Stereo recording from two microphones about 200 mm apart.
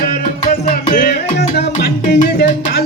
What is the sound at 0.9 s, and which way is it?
Music, 40° left (ahead or behind).